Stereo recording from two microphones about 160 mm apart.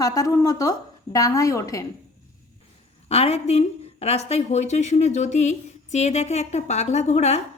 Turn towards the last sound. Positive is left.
turn(degrees=45)  # may be behind; listen again after turning